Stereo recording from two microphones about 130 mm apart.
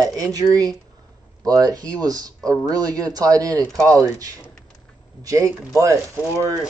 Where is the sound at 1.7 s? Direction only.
30° right (ahead or behind).